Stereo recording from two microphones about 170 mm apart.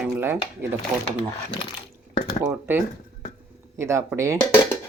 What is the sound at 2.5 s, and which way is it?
Speech, 10° right (ahead or behind).